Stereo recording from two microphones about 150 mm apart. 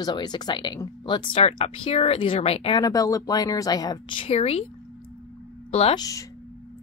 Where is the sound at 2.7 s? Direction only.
25° left (ahead or behind); by 4.6 s 45° left (ahead or behind).